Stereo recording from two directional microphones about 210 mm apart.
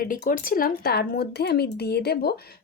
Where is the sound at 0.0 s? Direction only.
40° left (ahead or behind).